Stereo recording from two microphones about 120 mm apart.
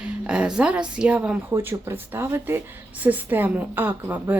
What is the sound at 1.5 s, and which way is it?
A woman's voice, 20° right (ahead or behind).